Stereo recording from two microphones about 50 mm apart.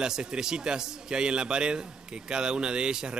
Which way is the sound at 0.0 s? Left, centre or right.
Centre.